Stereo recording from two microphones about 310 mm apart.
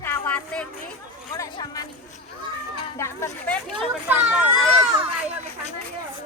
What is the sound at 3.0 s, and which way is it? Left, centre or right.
A woman's voice, centre.